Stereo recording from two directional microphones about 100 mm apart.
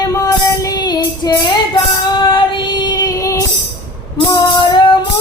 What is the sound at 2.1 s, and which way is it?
Child singing, 50° left (ahead or behind).